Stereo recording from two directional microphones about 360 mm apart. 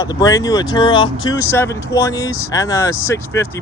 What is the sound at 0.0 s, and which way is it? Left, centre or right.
Speech, centre.